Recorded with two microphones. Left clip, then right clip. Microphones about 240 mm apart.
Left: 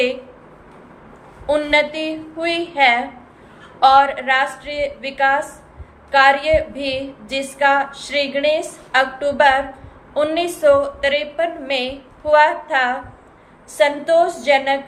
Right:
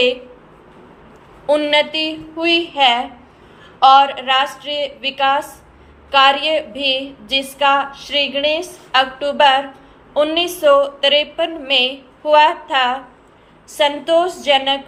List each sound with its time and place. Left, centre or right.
1.5 s a woman's voice: centre
7.9 s a woman's voice: right
8.1 s a woman's voice: centre